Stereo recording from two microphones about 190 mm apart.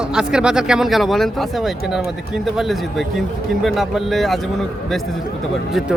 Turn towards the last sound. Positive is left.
turn(degrees=0)  # may be behind; listen again after turning